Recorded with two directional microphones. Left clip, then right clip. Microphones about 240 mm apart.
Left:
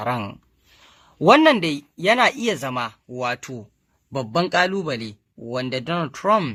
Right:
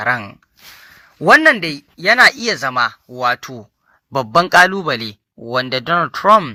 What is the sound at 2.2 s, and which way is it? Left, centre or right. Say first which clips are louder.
A man's voice: right 8 dB; centre.